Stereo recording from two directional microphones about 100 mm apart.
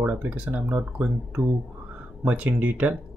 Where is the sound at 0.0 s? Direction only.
15° right (ahead or behind).